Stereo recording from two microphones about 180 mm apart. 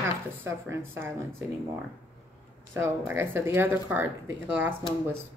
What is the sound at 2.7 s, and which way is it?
Speech, 10° right (ahead or behind).